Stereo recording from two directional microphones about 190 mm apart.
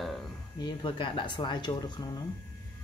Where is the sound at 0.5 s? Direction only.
25° left (ahead or behind).